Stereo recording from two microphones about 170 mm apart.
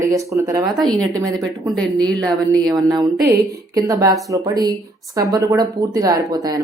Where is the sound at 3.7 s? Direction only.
20° right (ahead or behind).